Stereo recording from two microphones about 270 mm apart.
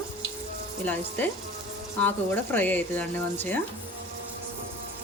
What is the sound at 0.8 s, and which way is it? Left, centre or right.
Speech, centre.